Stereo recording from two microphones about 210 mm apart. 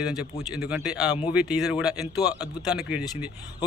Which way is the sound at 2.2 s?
20° left (ahead or behind).